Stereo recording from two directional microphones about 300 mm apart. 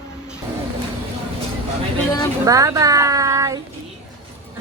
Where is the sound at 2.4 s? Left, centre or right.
Centre.